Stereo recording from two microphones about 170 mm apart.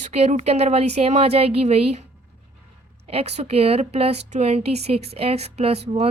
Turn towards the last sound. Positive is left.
turn(degrees=-35)  # may be behind; listen again after turning